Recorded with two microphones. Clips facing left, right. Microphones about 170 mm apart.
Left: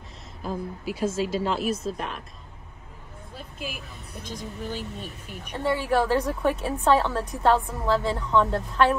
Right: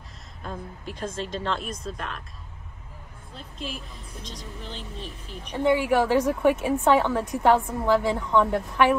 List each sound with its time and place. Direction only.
0.4 s a woman's voice: 5° left (ahead or behind)
3.3 s a woman's voice: 5° left (ahead or behind)
5.6 s a woman's voice: 15° right (ahead or behind)